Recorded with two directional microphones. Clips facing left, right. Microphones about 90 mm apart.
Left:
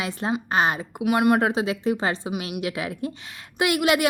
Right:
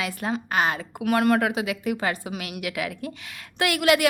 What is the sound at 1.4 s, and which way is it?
A woman's voice, 30° left (ahead or behind).